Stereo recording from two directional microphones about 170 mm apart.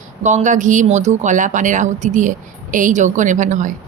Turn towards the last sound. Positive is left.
turn(degrees=-45)  # may be behind; listen again after turning